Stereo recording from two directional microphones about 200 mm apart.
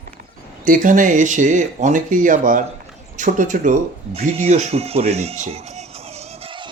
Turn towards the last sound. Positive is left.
turn(degrees=-25)  # may be behind; listen again after turning